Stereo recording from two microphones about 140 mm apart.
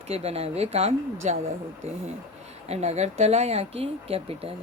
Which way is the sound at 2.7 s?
50° right (ahead or behind).